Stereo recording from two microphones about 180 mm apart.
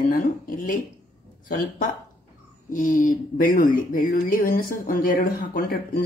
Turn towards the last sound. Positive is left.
turn(degrees=55)  # may be behind; listen again after turning